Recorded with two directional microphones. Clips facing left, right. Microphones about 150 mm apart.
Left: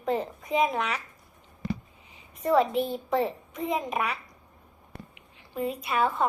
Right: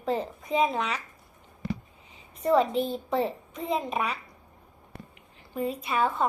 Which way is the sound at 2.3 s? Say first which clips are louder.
Even; 35° right (ahead or behind).